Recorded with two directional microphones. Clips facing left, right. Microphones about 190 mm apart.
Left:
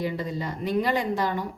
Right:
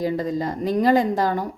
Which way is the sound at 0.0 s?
40° right (ahead or behind).